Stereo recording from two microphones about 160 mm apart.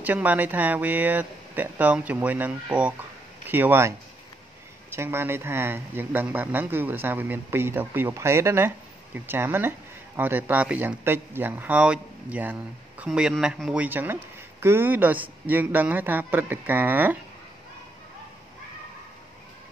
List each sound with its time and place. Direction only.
0.0 s speech: 10° right (ahead or behind)
4.9 s speech: 15° right (ahead or behind)